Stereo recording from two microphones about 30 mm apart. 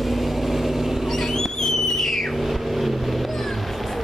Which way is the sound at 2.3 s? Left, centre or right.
Centre.